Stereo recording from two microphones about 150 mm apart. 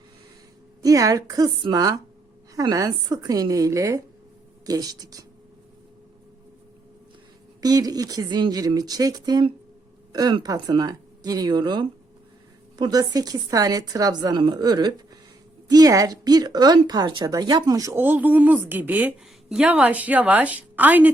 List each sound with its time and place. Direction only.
0.8 s a woman's voice: 25° right (ahead or behind)
7.6 s a woman's voice: 25° right (ahead or behind)